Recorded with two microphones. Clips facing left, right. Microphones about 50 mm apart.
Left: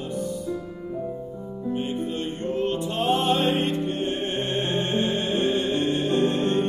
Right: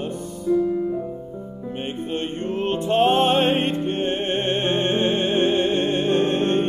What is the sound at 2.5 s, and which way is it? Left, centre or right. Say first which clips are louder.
Music: right 7 dB; right.